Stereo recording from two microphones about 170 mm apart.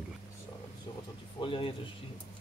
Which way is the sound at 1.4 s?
30° left (ahead or behind).